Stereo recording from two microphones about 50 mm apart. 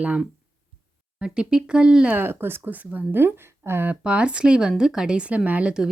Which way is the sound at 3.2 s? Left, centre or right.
Right.